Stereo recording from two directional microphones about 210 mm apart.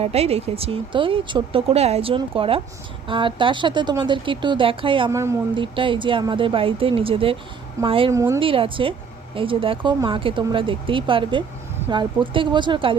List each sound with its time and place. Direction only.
0.0 s speech: 30° right (ahead or behind)
8.1 s a woman's voice: 15° right (ahead or behind)
8.4 s speech: 25° right (ahead or behind)